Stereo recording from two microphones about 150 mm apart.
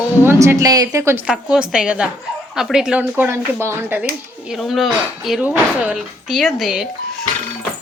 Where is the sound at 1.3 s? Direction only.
5° right (ahead or behind).